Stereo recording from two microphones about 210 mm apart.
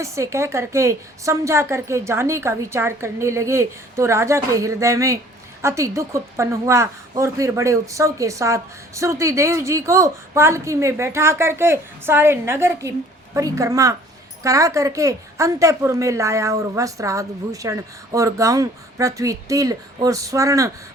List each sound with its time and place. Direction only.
0.0 s a woman's voice: 15° right (ahead or behind)